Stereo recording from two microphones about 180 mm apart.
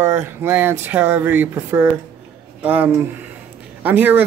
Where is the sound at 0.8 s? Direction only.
10° right (ahead or behind).